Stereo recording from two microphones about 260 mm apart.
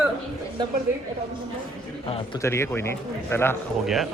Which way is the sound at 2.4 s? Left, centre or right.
Centre.